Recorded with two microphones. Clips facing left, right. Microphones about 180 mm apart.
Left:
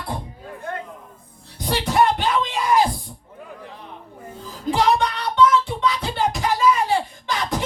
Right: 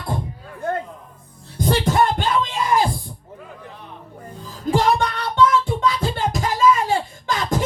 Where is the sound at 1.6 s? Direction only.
45° right (ahead or behind).